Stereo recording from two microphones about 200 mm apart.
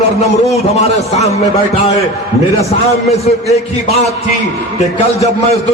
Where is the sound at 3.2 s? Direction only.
30° left (ahead or behind).